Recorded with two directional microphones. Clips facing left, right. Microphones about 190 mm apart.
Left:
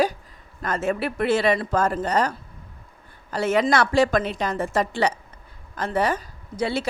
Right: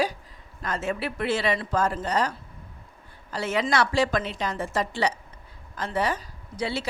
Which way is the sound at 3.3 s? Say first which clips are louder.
Left 5 dB; 50° left (ahead or behind).